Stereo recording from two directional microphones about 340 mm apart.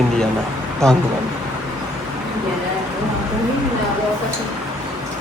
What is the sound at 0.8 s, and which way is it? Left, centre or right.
Speech, centre.